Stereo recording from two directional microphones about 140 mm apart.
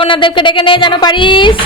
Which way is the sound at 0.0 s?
35° left (ahead or behind).